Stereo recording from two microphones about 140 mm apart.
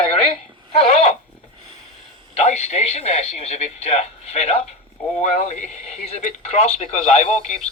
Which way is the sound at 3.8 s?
50° left (ahead or behind).